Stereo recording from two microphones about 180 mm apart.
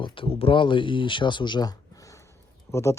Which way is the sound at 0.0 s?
30° left (ahead or behind).